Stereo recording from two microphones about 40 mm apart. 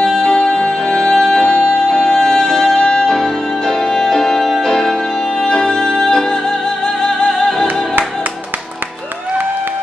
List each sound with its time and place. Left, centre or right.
0.0 s music: centre
1.4 s music: left
3.2 s music: centre